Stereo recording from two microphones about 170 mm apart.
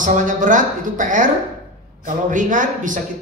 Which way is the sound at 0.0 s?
50° right (ahead or behind).